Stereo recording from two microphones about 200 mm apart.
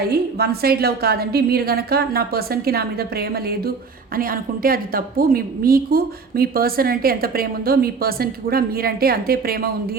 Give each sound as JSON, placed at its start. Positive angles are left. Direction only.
{"t": 0.1, "sound": "a woman's voice", "side_deg": -50}